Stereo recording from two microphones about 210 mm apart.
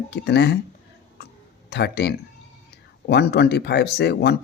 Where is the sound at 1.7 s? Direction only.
55° left (ahead or behind).